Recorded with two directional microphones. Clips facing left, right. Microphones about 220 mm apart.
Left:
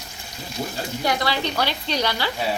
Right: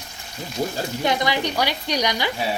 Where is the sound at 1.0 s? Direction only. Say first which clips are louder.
Right 1 dB; 20° right (ahead or behind).